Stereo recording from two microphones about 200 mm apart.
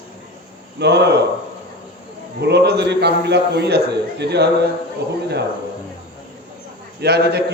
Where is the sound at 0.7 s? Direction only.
55° right (ahead or behind).